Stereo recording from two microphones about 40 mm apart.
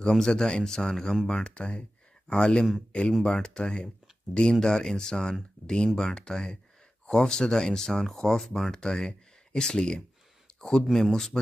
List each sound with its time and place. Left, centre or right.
0.1 s speech: centre
1.5 s speech: left; by 8.7 s centre
8.7 s speech: centre